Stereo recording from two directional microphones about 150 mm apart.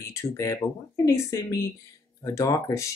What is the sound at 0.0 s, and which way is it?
Speech, 20° left (ahead or behind).